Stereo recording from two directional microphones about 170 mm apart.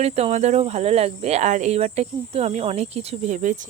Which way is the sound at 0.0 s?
40° right (ahead or behind).